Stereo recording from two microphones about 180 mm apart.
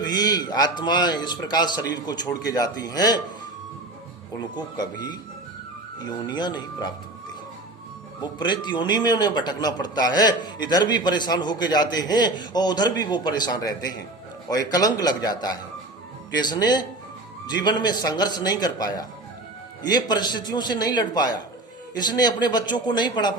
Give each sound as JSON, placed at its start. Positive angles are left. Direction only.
{"t": 0.0, "sound": "a man's voice", "side_deg": 20}
{"t": 4.4, "sound": "a man's voice", "side_deg": 25}
{"t": 8.2, "sound": "a man's voice", "side_deg": 25}